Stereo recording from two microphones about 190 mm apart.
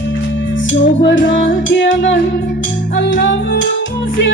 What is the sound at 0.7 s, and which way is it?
Music, 75° left (ahead or behind).